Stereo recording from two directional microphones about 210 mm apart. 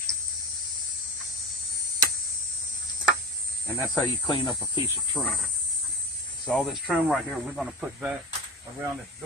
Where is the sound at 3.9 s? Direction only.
20° left (ahead or behind).